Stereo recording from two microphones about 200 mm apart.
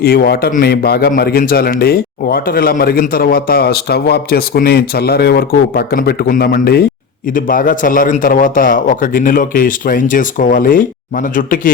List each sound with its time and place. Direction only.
0.0 s a man's voice: 50° left (ahead or behind)